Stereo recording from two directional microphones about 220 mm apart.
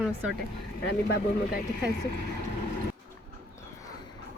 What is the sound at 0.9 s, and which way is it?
Speech, 50° left (ahead or behind).